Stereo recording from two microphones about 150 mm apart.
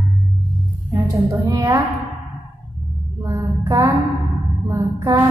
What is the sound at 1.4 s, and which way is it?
Speech, 20° right (ahead or behind).